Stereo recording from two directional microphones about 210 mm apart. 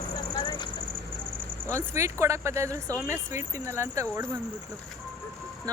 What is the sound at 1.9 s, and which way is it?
Speech, 15° right (ahead or behind).